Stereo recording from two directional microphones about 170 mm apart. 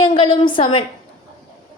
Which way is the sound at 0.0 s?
30° left (ahead or behind).